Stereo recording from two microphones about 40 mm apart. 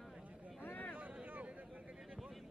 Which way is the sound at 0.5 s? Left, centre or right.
Left.